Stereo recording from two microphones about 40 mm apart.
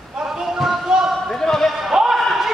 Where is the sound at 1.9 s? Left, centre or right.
Centre.